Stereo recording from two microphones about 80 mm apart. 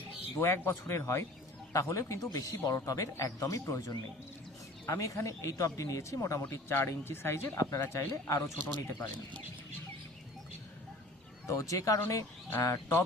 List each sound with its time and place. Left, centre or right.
0.3 s a man's voice: left
11.4 s speech: left
12.0 s speech: left